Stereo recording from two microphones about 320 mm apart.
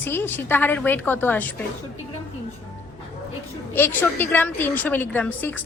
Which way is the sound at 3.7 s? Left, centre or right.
Centre.